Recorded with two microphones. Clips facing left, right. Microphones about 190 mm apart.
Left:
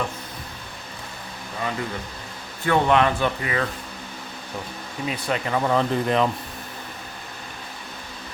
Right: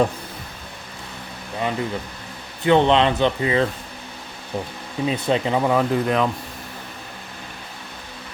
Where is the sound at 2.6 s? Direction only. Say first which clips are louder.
Right 3 dB; 25° right (ahead or behind).